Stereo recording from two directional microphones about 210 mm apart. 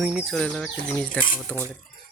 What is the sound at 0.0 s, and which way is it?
Speech, 5° right (ahead or behind).